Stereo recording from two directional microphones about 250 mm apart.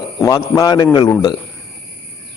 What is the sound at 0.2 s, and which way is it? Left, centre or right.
Speech, centre.